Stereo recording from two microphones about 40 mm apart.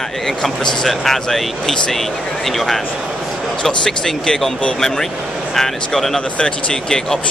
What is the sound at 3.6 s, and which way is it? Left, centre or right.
Speech, centre.